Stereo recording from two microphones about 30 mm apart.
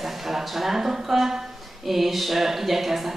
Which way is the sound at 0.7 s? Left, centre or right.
Centre.